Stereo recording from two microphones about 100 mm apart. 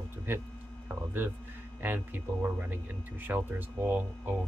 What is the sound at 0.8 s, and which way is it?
Hum, 20° right (ahead or behind).